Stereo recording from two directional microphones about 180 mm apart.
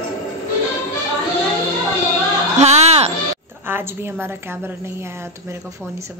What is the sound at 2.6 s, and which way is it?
Music, 35° right (ahead or behind).